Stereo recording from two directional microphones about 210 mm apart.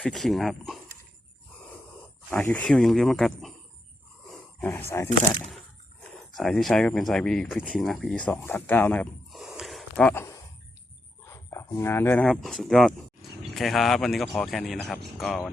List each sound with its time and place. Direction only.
0.0 s speech: centre (ahead or behind)
2.3 s speech: 5° left (ahead or behind)
4.3 s a sound: 10° left (ahead or behind)
6.1 s speech: centre (ahead or behind)